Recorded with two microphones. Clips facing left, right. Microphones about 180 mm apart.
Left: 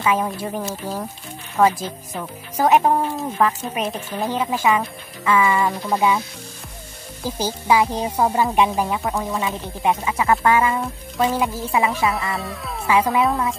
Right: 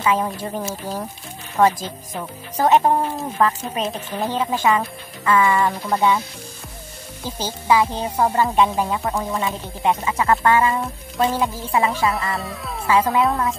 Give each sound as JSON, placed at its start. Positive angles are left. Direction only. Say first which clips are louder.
{"t": 0.0, "sound": "speech", "louder": "even", "side_deg": 10}
{"t": 0.6, "sound": "speech", "louder": "even", "side_deg": -5}
{"t": 1.6, "sound": "speech", "louder": "even", "side_deg": 10}
{"t": 7.2, "sound": "speech", "louder": "left 1 dB", "side_deg": 10}
{"t": 10.0, "sound": "speech", "louder": "even", "side_deg": 10}
{"t": 11.8, "sound": "speech", "louder": "right 1 dB", "side_deg": 5}
{"t": 12.9, "sound": "speech", "louder": "even", "side_deg": 10}